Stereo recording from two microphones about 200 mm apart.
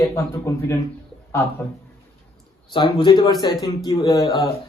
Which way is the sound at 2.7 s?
25° left (ahead or behind).